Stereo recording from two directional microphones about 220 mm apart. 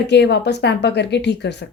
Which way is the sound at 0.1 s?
50° left (ahead or behind).